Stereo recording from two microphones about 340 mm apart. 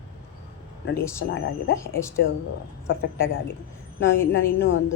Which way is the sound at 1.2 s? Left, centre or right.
Left.